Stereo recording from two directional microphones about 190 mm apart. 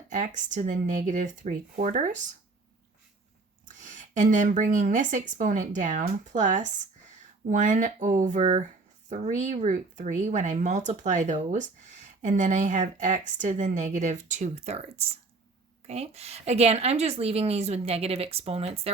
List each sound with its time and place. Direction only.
0.1 s speech: 40° right (ahead or behind)
3.7 s speech: 40° right (ahead or behind)